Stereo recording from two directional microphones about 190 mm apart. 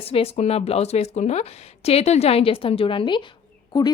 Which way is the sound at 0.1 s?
30° left (ahead or behind).